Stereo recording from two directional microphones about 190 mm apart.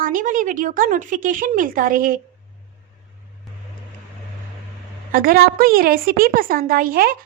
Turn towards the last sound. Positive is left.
turn(degrees=-50)  # may be behind; listen again after turning